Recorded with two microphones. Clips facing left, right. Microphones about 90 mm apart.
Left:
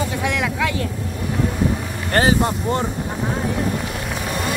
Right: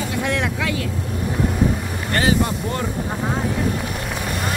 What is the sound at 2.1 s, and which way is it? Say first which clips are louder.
Speech: left 2 dB; 35° left (ahead or behind).